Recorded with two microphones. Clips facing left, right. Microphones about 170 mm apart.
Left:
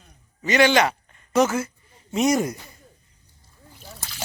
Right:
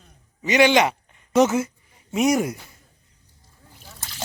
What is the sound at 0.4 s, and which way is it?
Speech, 15° right (ahead or behind).